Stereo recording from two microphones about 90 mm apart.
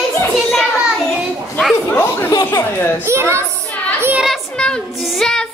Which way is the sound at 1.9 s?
25° left (ahead or behind).